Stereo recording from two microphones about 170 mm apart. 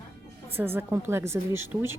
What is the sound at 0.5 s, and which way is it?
Speech, 15° right (ahead or behind).